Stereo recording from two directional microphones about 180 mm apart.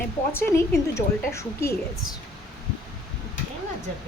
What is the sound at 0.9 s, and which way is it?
Speech, 15° left (ahead or behind).